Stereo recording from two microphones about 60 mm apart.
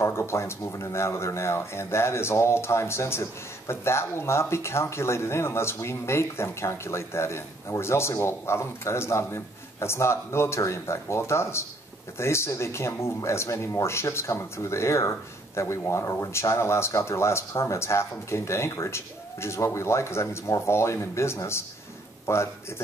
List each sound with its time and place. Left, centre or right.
0.0 s a man's voice: left